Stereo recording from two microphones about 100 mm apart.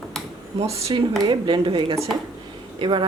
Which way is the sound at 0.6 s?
90° right.